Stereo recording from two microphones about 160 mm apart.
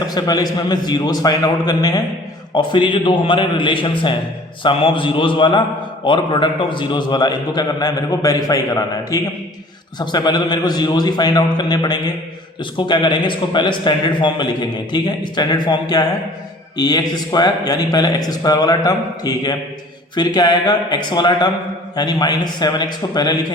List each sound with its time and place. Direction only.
0.0 s a man's voice: 25° left (ahead or behind)